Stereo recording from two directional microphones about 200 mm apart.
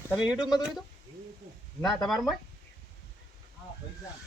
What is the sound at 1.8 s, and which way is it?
Speech, centre (ahead or behind).